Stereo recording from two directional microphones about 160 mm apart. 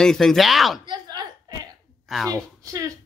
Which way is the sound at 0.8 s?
25° right (ahead or behind).